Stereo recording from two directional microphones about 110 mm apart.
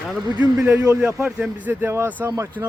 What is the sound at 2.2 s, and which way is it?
Speech, 30° right (ahead or behind).